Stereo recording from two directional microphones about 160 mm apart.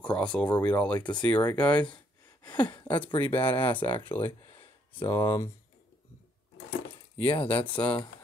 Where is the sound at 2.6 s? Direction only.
25° left (ahead or behind).